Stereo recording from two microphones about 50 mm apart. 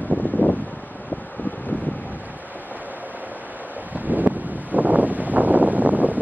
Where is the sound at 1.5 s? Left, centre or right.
Left.